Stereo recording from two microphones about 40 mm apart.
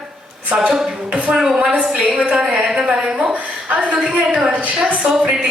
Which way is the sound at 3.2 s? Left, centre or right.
Right.